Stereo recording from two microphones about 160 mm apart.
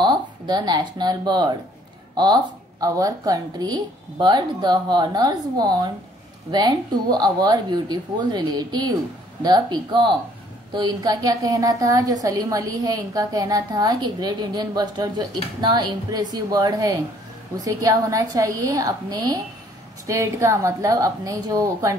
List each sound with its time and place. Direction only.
0.0 s a woman's voice: 25° right (ahead or behind)